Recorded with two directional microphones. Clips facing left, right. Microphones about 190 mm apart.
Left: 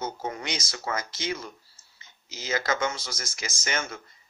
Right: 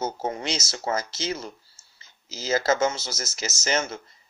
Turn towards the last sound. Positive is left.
turn(degrees=-25)  # may be behind; listen again after turning